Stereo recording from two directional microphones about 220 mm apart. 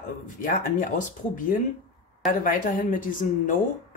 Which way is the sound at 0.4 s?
35° left (ahead or behind).